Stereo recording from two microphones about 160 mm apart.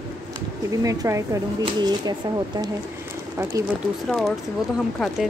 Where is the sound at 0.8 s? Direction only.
20° right (ahead or behind).